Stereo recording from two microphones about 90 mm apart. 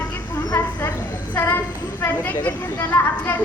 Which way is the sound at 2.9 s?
20° left (ahead or behind).